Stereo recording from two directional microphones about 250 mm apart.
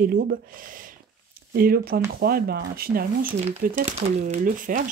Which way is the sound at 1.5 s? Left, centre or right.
Right.